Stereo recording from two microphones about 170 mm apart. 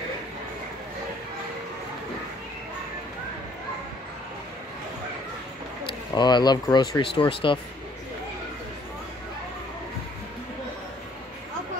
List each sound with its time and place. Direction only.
5.9 s speech: 25° left (ahead or behind)